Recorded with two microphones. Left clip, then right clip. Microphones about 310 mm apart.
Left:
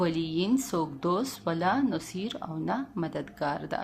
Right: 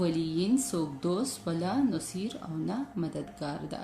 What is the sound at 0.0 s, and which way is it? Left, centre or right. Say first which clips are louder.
Speech: left 2 dB; left.